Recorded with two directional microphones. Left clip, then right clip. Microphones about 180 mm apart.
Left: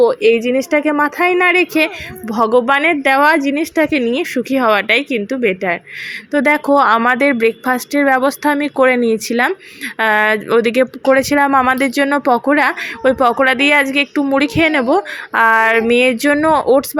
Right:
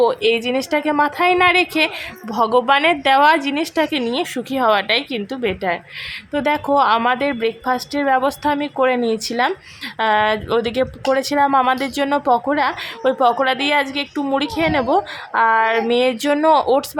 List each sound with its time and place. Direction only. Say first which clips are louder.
0.0 s a woman's voice: left 5 dB; 15° left (ahead or behind)